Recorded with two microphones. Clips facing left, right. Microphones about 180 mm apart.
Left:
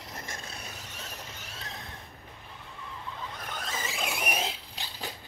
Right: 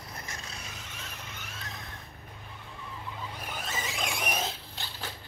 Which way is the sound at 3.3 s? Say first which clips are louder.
Right 1 dB; 5° right (ahead or behind).